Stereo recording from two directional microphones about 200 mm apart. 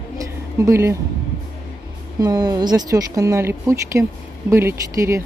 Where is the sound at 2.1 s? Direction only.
20° right (ahead or behind).